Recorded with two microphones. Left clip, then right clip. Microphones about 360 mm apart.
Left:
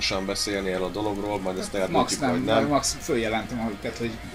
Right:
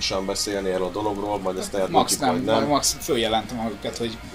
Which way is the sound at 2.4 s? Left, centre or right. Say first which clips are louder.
Left 1 dB; right.